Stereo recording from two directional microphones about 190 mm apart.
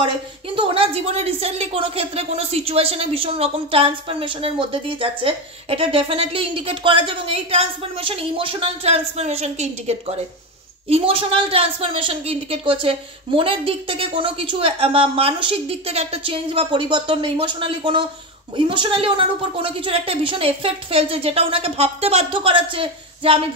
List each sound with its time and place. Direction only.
0.6 s a woman's voice: 30° right (ahead or behind)